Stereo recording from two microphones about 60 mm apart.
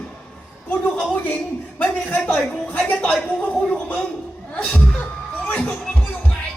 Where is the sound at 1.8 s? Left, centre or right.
Left.